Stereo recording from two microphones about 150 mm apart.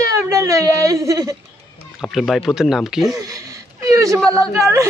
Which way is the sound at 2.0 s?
Centre (ahead or behind).